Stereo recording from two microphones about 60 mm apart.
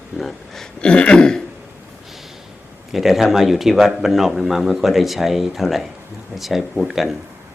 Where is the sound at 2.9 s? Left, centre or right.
Centre.